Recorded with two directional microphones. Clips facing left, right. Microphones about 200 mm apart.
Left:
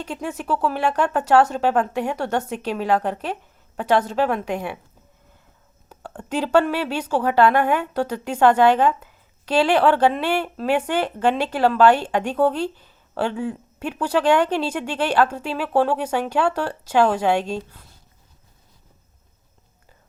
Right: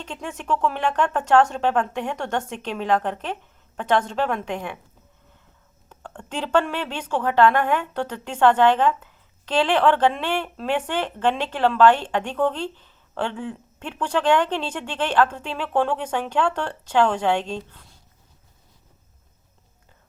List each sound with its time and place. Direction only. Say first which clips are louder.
0.0 s speech: left 5 dB; 10° left (ahead or behind)
5.9 s speech: left 6 dB; 10° left (ahead or behind)